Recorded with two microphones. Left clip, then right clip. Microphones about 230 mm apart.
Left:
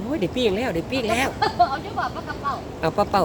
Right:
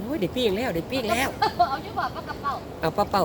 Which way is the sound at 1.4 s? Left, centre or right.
Centre.